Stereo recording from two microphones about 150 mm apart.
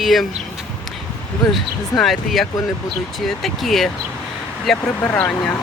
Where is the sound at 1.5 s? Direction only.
Centre (ahead or behind).